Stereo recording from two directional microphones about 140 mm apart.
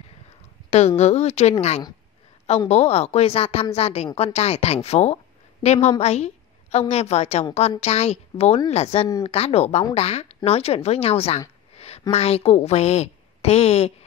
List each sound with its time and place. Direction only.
0.7 s a woman's voice: 50° left (ahead or behind)
11.7 s a sound: 50° left (ahead or behind)
12.1 s a woman's voice: 45° left (ahead or behind)